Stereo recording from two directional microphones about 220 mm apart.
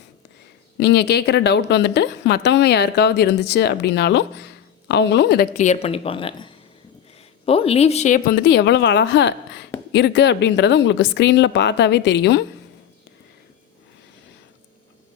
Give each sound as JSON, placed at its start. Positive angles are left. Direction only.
{"t": 0.8, "sound": "a woman's voice", "side_deg": 50}
{"t": 5.5, "sound": "a woman's voice", "side_deg": 30}